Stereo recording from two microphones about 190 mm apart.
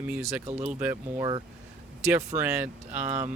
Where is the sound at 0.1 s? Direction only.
5° right (ahead or behind).